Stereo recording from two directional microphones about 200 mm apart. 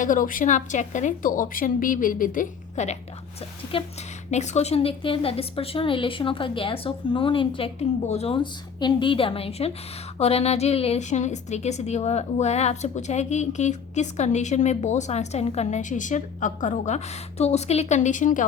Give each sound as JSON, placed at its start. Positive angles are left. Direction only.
{"t": 0.0, "sound": "a woman's voice", "side_deg": 40}
{"t": 4.3, "sound": "a woman's voice", "side_deg": 35}